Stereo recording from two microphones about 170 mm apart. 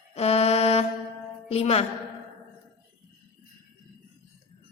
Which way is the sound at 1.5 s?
35° left (ahead or behind).